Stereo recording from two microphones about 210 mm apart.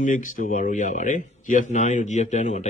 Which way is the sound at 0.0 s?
40° left (ahead or behind).